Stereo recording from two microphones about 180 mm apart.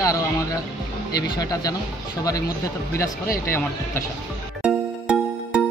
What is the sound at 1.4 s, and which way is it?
Speech, 20° left (ahead or behind).